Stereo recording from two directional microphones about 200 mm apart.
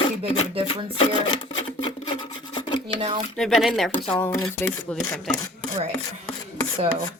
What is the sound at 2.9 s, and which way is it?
Speech, 30° right (ahead or behind).